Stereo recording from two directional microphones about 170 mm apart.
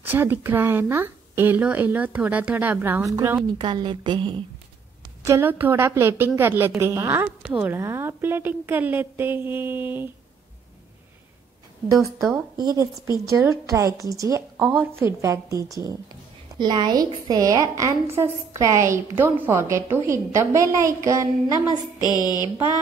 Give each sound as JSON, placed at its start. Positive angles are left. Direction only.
{"t": 0.0, "sound": "a woman's voice", "side_deg": -10}
{"t": 3.5, "sound": "a woman's voice", "side_deg": -30}
{"t": 5.2, "sound": "a woman's voice", "side_deg": -15}
{"t": 11.9, "sound": "a woman's voice", "side_deg": -15}
{"t": 14.6, "sound": "a woman's voice", "side_deg": -5}
{"t": 15.0, "sound": "a woman's voice", "side_deg": -15}
{"t": 22.0, "sound": "a sound", "side_deg": 25}